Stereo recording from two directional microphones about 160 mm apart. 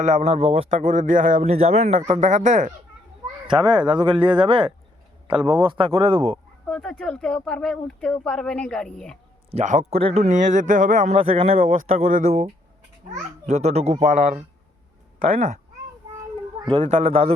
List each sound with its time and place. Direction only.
0.0 s speech: 45° right (ahead or behind)
0.9 s speech: 55° right (ahead or behind)
3.4 s speech: 30° right (ahead or behind)
6.7 s speech: 5° left (ahead or behind)
9.5 s speech: 45° right (ahead or behind)
11.2 s speech: 35° right (ahead or behind)
11.6 s speech: 55° right (ahead or behind)
16.8 s speech: 40° right (ahead or behind)